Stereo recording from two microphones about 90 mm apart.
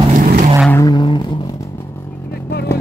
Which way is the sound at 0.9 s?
55° left (ahead or behind).